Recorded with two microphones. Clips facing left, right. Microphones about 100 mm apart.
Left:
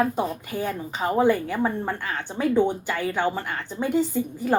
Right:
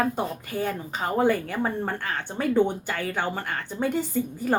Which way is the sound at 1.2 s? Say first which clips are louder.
Left 2 dB; 45° right (ahead or behind).